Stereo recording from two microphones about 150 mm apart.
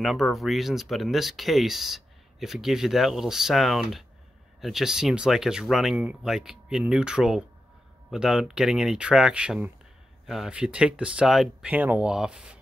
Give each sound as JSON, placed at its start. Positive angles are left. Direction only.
{"t": 0.0, "sound": "speech", "side_deg": 0}